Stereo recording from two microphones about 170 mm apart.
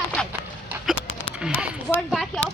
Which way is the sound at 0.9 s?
5° right (ahead or behind).